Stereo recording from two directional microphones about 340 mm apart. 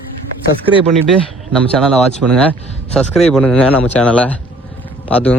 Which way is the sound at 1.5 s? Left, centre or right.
Centre.